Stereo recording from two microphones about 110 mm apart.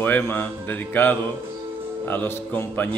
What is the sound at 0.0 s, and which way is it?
A man's voice, 15° left (ahead or behind).